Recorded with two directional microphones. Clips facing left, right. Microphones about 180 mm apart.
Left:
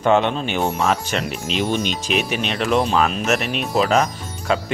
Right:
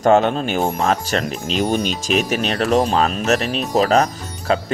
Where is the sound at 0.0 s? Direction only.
40° right (ahead or behind).